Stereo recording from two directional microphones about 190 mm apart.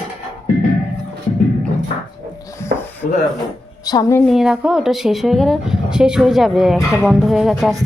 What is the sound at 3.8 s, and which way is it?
Speech, 20° left (ahead or behind).